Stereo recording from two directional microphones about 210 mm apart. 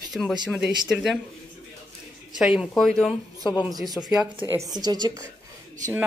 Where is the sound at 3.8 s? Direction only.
20° right (ahead or behind).